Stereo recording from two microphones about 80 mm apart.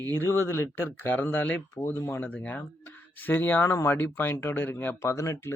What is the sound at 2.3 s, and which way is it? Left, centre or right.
Speech, centre.